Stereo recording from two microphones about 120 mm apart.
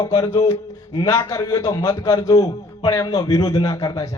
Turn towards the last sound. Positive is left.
turn(degrees=30)  # may be behind; listen again after turning